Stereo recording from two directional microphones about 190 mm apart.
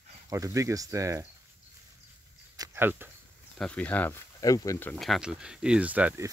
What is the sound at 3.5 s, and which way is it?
Speech, 5° left (ahead or behind).